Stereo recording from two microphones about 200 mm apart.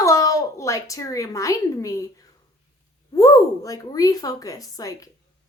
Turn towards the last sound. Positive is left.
turn(degrees=20)  # may be behind; listen again after turning